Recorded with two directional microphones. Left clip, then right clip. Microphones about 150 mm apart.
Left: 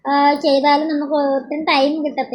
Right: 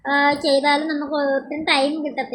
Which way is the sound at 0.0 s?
20° left (ahead or behind).